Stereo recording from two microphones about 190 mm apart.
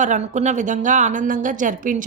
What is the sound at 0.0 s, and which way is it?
A woman's voice, 40° right (ahead or behind).